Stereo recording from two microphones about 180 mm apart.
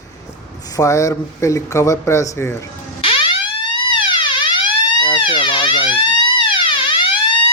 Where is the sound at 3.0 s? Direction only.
30° left (ahead or behind).